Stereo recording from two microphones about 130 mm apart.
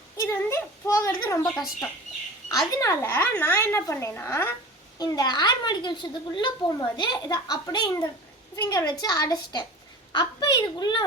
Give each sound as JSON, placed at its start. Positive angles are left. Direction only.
{"t": 0.2, "sound": "speech", "side_deg": 20}
{"t": 2.5, "sound": "speech", "side_deg": 30}
{"t": 4.9, "sound": "speech", "side_deg": 30}